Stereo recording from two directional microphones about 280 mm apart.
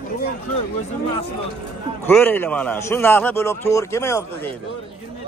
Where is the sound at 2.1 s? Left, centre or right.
Centre.